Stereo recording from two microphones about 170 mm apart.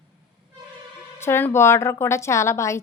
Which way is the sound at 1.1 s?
15° left (ahead or behind).